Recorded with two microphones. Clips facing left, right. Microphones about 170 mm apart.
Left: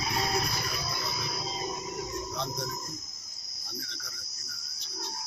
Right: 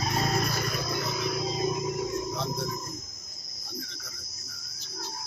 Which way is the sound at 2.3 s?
5° right (ahead or behind).